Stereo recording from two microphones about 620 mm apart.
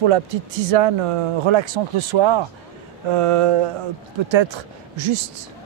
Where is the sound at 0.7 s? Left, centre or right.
Right.